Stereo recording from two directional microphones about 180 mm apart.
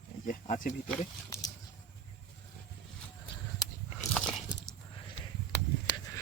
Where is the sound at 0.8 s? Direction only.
20° left (ahead or behind).